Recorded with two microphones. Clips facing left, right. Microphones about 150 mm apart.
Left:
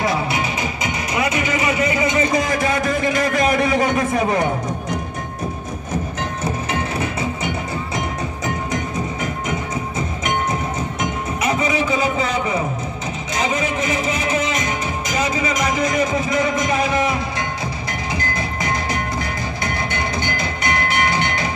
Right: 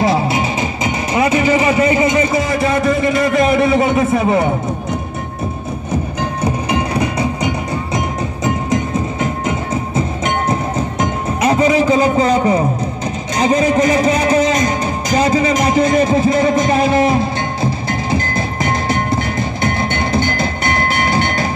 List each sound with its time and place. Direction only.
0.0 s music: 25° right (ahead or behind)
2.3 s a sound: centre (ahead or behind)
11.0 s music: 35° right (ahead or behind)
18.7 s music: 30° right (ahead or behind)